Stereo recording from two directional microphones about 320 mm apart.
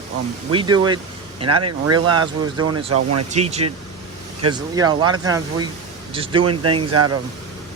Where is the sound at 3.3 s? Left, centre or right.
Centre.